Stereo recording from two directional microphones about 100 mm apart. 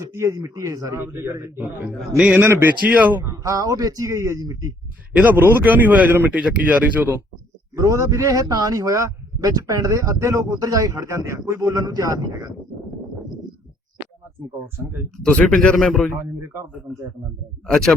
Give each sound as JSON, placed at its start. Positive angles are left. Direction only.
{"t": 0.1, "sound": "a man's voice", "side_deg": -30}
{"t": 3.2, "sound": "a man's voice", "side_deg": -35}
{"t": 5.1, "sound": "speech", "side_deg": -15}
{"t": 7.8, "sound": "a man's voice", "side_deg": -30}
{"t": 15.2, "sound": "speech", "side_deg": 10}
{"t": 16.1, "sound": "a man's voice", "side_deg": -25}
{"t": 17.7, "sound": "speech", "side_deg": 5}